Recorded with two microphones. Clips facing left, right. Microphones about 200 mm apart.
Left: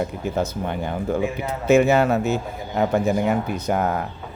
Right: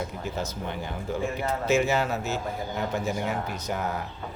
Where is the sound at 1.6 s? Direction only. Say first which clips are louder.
Left 9 dB; 60° left (ahead or behind).